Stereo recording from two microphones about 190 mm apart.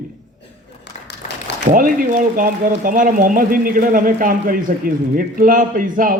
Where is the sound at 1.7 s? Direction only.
45° right (ahead or behind).